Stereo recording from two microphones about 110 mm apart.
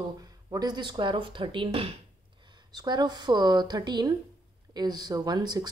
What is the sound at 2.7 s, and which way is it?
A woman's voice, 40° right (ahead or behind).